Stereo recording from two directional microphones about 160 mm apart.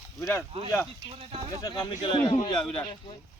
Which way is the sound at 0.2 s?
15° left (ahead or behind).